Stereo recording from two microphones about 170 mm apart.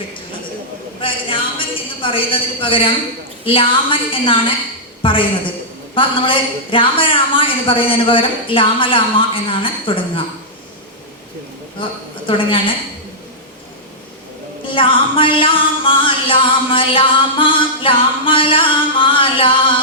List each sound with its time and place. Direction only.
1.0 s music: 30° left (ahead or behind)
11.8 s a woman's voice: 30° left (ahead or behind)
14.7 s music: 30° left (ahead or behind)